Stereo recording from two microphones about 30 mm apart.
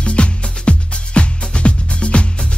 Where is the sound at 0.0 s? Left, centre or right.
Left.